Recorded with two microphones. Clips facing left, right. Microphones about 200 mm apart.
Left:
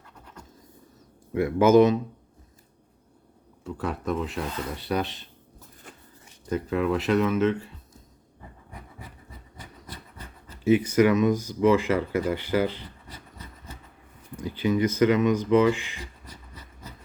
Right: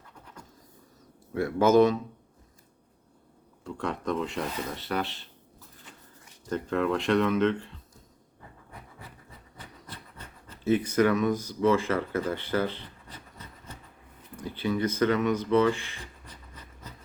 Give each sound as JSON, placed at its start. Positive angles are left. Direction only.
{"t": 1.3, "sound": "speech", "side_deg": 15}
{"t": 3.6, "sound": "speech", "side_deg": 5}
{"t": 4.8, "sound": "speech", "side_deg": 15}
{"t": 6.5, "sound": "speech", "side_deg": 5}
{"t": 8.7, "sound": "a sound", "side_deg": 10}
{"t": 11.6, "sound": "speech", "side_deg": 10}
{"t": 14.4, "sound": "speech", "side_deg": 15}
{"t": 16.3, "sound": "a sound", "side_deg": 10}